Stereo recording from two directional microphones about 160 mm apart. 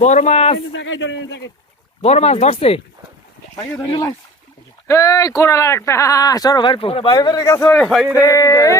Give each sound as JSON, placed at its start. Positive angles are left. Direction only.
{"t": 0.0, "sound": "a man's voice", "side_deg": 50}
{"t": 2.0, "sound": "speech", "side_deg": 40}
{"t": 3.5, "sound": "speech", "side_deg": 15}
{"t": 4.9, "sound": "speech", "side_deg": 20}
{"t": 7.7, "sound": "speech", "side_deg": 5}
{"t": 8.2, "sound": "speech", "side_deg": 20}